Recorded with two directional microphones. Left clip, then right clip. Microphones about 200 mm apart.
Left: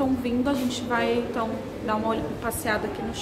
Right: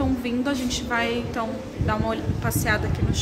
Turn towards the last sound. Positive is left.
turn(degrees=-5)  # may be behind; listen again after turning